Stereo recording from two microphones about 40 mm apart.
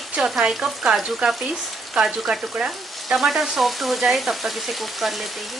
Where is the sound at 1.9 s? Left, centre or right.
Centre.